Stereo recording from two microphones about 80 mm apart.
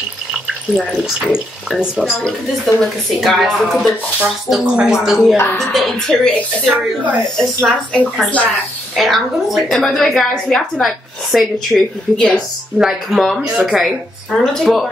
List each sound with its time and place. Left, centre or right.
0.7 s a woman's voice: centre
6.6 s speech: centre
7.3 s a woman's voice: centre